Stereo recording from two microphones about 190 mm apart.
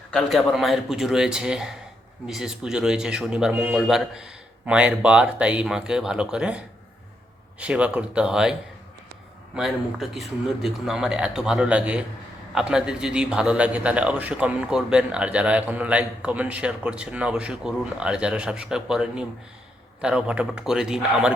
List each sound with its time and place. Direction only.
0.1 s a man's voice: 5° left (ahead or behind)
7.6 s a man's voice: 5° right (ahead or behind)
9.6 s a man's voice: centre (ahead or behind)